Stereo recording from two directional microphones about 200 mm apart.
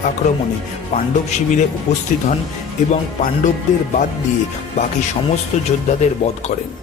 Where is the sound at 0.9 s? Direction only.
40° left (ahead or behind).